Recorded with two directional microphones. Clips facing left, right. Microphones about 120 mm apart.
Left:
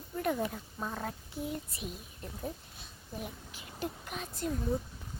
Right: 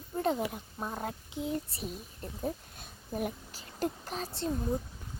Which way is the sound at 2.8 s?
50° right (ahead or behind).